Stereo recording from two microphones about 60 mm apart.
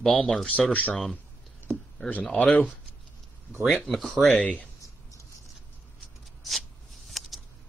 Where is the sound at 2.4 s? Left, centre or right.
Left.